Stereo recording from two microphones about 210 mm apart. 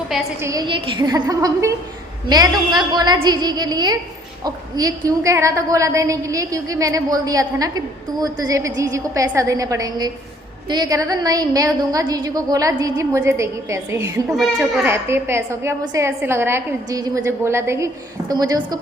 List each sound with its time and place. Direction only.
0.1 s a woman's voice: 10° right (ahead or behind)